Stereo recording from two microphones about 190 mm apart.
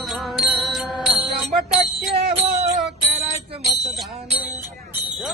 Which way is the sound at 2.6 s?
35° right (ahead or behind).